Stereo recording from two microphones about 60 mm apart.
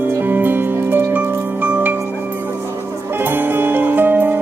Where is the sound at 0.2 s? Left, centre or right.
Right.